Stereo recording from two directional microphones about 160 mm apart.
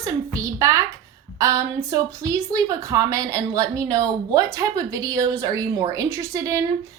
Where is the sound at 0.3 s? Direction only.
20° right (ahead or behind).